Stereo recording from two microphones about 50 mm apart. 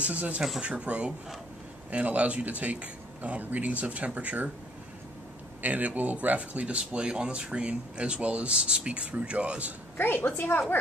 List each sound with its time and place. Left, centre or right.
0.0 s speech: right
5.6 s speech: right
9.9 s a woman's voice: left